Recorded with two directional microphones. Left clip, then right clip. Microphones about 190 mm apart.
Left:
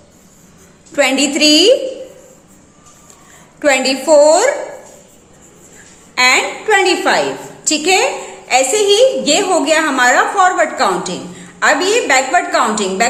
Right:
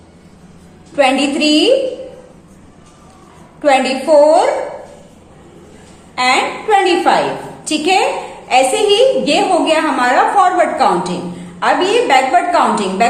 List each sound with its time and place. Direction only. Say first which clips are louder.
0.9 s a woman's voice: even; 40° left (ahead or behind)
3.6 s a woman's voice: right 1 dB; 45° left (ahead or behind)
6.1 s a woman's voice: left 2 dB; 40° left (ahead or behind)